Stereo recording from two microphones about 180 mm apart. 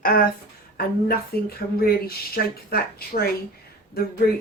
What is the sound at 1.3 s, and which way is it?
Speech, 60° left (ahead or behind).